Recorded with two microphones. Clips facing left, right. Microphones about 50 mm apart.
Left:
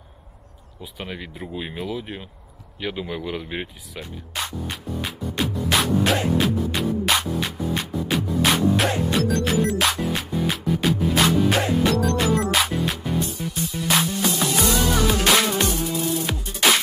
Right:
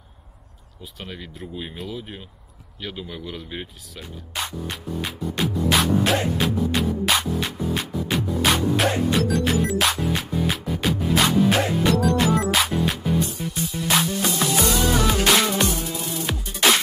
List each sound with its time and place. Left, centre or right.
0.9 s speech: centre
4.0 s music: centre